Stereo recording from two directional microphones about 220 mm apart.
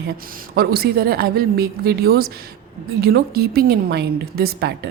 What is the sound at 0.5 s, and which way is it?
A woman's voice, 45° right (ahead or behind).